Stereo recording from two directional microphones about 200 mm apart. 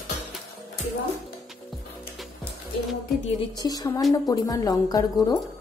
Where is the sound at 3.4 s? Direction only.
20° left (ahead or behind).